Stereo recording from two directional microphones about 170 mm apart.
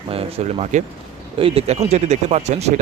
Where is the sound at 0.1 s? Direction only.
35° right (ahead or behind).